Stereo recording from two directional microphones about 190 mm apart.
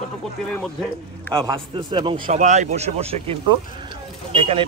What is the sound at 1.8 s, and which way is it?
Speech, 25° right (ahead or behind).